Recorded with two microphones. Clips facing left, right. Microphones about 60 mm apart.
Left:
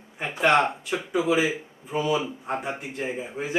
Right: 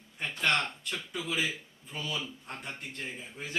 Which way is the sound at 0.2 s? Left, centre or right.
Centre.